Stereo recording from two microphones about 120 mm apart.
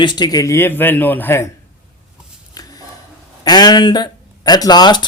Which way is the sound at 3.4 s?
35° left (ahead or behind).